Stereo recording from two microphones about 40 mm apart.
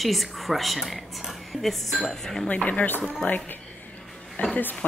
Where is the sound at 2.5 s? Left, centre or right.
Left.